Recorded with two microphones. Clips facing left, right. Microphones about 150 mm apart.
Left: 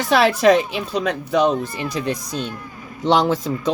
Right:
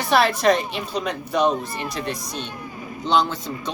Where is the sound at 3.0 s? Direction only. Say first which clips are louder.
Left 4 dB; 90° left.